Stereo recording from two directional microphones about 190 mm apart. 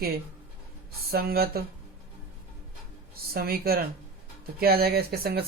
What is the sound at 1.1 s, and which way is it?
Speech, 55° right (ahead or behind).